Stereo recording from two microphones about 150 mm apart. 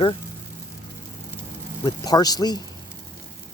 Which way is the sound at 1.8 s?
25° left (ahead or behind).